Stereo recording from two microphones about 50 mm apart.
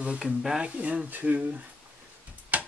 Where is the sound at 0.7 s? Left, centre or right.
Right.